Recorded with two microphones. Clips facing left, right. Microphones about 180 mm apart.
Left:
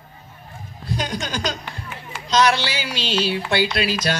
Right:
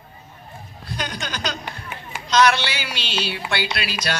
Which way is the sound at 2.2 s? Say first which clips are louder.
Even; 40° left (ahead or behind).